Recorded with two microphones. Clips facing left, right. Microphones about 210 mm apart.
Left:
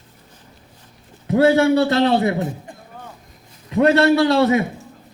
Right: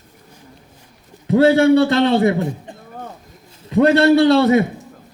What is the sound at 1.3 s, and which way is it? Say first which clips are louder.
Speech: right 3 dB; 30° right (ahead or behind).